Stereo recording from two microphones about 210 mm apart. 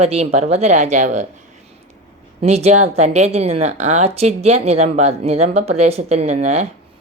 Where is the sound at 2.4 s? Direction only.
30° right (ahead or behind).